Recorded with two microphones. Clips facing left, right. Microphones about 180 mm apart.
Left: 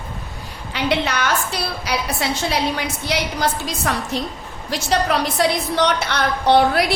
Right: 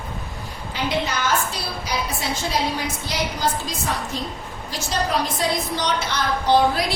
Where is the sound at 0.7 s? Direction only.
70° left (ahead or behind).